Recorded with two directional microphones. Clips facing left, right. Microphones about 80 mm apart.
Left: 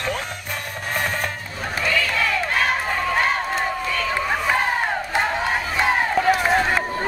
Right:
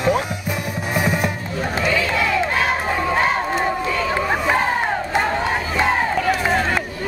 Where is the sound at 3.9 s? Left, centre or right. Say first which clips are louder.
Right 3 dB; centre.